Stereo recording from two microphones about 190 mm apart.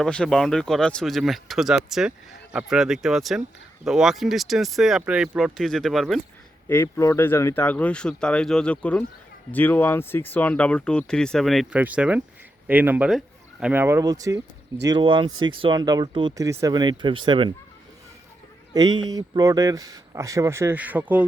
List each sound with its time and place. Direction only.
0.0 s speech: 5° left (ahead or behind)
6.7 s speech: 10° left (ahead or behind); by 17.5 s 25° right (ahead or behind)
18.7 s speech: 20° right (ahead or behind)